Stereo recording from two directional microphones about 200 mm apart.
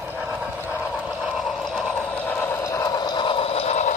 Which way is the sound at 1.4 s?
Centre (ahead or behind).